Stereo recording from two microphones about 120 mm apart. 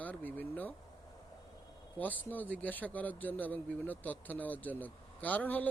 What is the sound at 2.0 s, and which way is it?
Speech, 15° left (ahead or behind).